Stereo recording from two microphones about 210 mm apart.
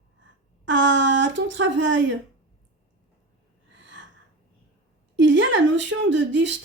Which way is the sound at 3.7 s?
60° right (ahead or behind).